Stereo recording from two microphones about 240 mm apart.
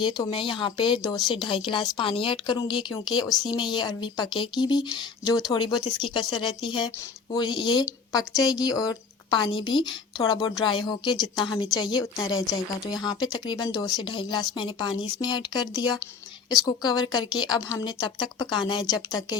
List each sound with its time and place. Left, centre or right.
0.0 s speech: centre